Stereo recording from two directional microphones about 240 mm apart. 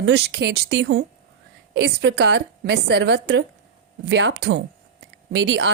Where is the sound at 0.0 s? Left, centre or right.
Right.